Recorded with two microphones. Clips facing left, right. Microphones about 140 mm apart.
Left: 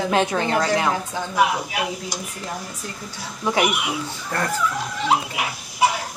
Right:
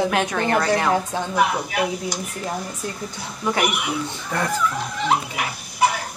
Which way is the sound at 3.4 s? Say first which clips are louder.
Left 1 dB; 15° left (ahead or behind).